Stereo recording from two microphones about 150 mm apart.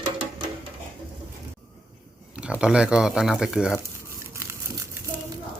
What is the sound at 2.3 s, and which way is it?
Speech, 5° right (ahead or behind).